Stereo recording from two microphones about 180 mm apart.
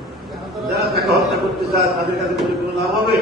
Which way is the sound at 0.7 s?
60° right (ahead or behind).